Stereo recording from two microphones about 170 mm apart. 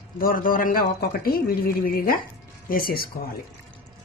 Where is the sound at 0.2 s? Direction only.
55° left (ahead or behind).